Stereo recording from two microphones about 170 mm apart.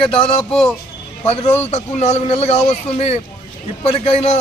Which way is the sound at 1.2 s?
40° left (ahead or behind).